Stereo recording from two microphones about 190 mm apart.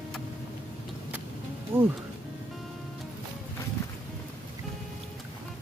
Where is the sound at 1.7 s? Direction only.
10° right (ahead or behind).